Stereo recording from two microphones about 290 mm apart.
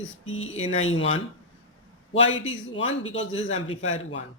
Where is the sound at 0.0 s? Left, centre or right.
Left.